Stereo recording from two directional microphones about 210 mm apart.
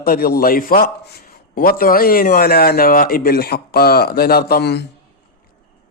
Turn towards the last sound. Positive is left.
turn(degrees=50)  # may be behind; listen again after turning